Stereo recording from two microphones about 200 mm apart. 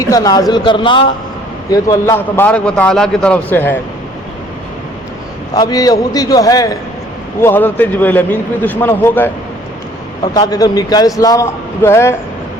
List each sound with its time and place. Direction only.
0.0 s a man's voice: 15° left (ahead or behind)
5.5 s a man's voice: 20° left (ahead or behind)
10.3 s a man's voice: 20° left (ahead or behind)